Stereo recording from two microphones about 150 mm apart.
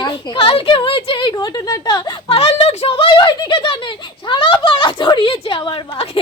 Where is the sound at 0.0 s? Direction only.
35° left (ahead or behind).